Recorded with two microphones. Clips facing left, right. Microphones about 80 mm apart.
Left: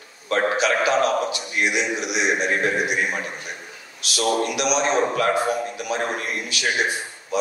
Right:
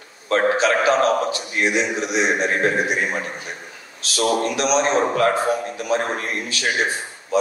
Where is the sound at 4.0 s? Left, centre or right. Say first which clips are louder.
Right 2 dB; right.